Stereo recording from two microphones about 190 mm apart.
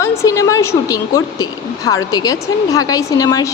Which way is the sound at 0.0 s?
15° left (ahead or behind).